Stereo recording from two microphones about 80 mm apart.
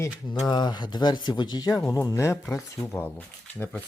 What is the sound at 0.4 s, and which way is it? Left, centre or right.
Speech, left.